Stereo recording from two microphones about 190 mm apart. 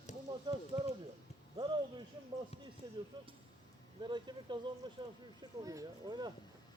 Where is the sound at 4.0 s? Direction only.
25° right (ahead or behind).